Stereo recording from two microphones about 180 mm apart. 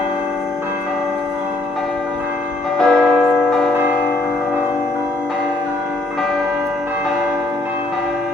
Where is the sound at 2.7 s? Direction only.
5° left (ahead or behind).